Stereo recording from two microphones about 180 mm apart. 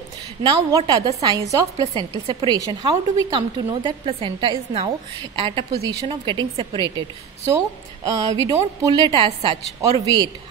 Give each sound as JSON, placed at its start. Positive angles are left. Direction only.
{"t": 0.7, "sound": "a woman's voice", "side_deg": -20}